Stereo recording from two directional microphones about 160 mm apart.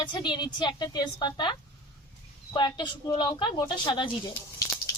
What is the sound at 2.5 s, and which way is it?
A woman's voice, 30° left (ahead or behind).